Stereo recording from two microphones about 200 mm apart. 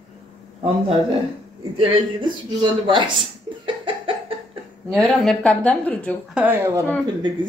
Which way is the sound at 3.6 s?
25° right (ahead or behind).